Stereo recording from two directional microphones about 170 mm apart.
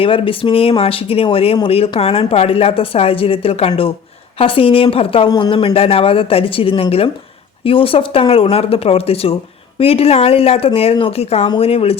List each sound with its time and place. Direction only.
0.0 s a woman's voice: 30° left (ahead or behind)